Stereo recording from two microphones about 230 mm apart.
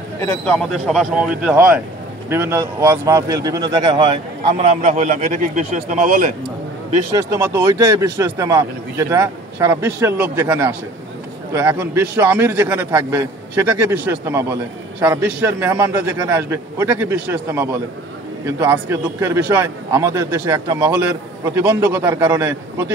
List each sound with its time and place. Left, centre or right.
0.2 s speech: centre
2.2 s a man's voice: centre
4.8 s a man's voice: right
7.1 s a man's voice: centre